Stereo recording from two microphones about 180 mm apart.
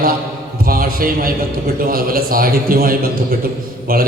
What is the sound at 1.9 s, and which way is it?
A man's voice, 55° right (ahead or behind).